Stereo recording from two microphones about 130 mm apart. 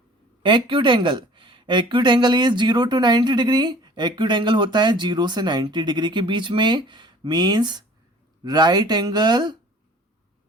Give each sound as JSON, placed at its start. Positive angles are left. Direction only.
{"t": 0.4, "sound": "speech", "side_deg": -40}